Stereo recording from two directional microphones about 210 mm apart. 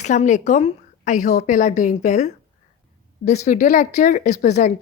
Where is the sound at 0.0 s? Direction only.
35° left (ahead or behind).